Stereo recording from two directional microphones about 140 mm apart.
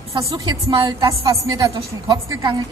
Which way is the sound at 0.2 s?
25° right (ahead or behind).